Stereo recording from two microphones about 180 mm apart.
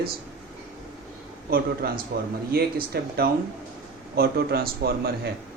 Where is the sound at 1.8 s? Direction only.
60° right (ahead or behind).